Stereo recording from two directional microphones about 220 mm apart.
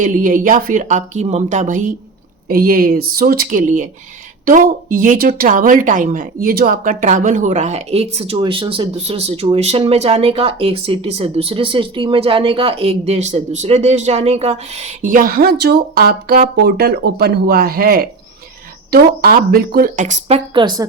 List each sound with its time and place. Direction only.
0.0 s speech: 35° right (ahead or behind); by 20.8 s 20° right (ahead or behind)